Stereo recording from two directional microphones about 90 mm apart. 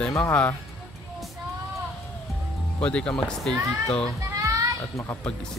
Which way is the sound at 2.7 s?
15° left (ahead or behind).